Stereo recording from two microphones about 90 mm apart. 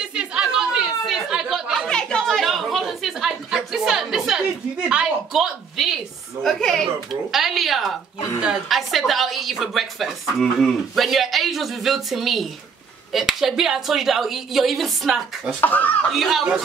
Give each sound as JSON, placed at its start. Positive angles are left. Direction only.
{"t": 0.0, "sound": "chatter", "side_deg": -10}
{"t": 1.9, "sound": "a sound", "side_deg": 10}
{"t": 6.4, "sound": "a woman's voice", "side_deg": 5}
{"t": 15.6, "sound": "speech", "side_deg": 20}
{"t": 16.1, "sound": "a woman's voice", "side_deg": 0}